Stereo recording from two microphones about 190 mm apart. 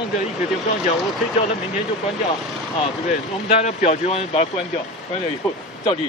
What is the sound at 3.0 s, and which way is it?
Speech, 35° left (ahead or behind).